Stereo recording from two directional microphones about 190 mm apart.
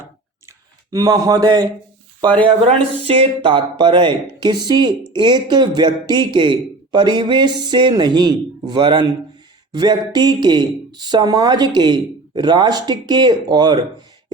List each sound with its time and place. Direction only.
0.4 s clicking: 20° right (ahead or behind)
3.1 s speech: 30° right (ahead or behind)